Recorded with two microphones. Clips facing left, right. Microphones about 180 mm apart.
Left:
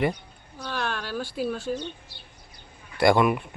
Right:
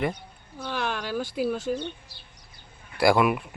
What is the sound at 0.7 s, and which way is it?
Speech, 15° right (ahead or behind).